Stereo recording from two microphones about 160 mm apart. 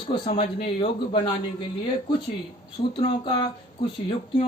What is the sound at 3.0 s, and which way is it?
Speech, 35° left (ahead or behind).